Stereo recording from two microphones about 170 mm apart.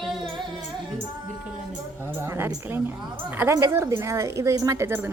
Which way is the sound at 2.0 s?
15° right (ahead or behind).